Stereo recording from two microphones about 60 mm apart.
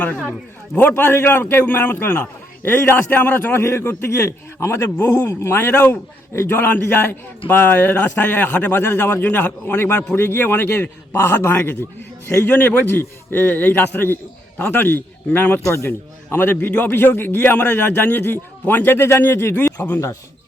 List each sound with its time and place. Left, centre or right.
0.3 s a man's voice: left
3.6 s a man's voice: left
8.8 s a man's voice: left
12.5 s a man's voice: left